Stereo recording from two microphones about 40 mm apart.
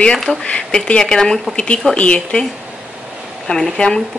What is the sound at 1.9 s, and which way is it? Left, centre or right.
Speech, left.